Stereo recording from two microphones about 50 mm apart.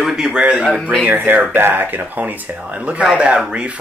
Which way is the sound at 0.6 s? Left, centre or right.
Centre.